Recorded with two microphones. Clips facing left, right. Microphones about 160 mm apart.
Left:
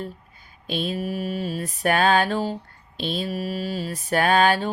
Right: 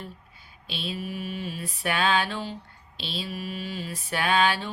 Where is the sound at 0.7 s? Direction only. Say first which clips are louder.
Left 7 dB; 45° left (ahead or behind).